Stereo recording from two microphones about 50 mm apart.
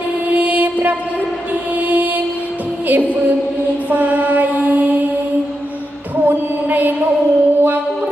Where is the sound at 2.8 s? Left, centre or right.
Right.